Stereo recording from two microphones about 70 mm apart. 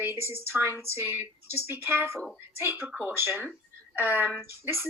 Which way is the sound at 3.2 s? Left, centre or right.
Right.